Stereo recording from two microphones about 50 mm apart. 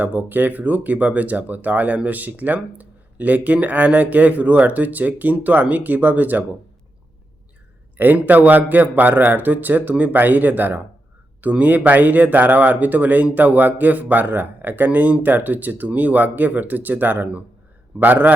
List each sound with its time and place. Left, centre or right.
0.0 s speech: right
7.9 s speech: right
14.8 s speech: right